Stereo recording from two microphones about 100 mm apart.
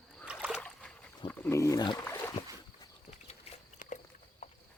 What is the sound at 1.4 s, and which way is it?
Wild animals, 30° left (ahead or behind).